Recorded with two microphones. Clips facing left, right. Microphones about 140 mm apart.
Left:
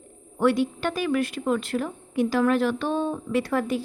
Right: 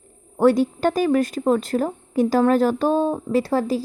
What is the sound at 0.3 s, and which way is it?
A woman's voice, 40° right (ahead or behind).